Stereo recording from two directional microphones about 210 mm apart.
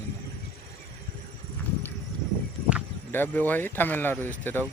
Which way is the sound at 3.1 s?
10° left (ahead or behind).